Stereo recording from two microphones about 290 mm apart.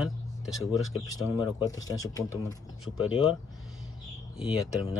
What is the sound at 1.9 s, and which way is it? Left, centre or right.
Speech, centre.